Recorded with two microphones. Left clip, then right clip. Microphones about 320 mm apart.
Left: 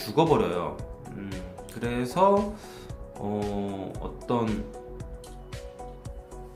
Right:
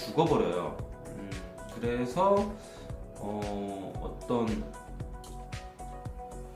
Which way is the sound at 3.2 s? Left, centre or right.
Centre.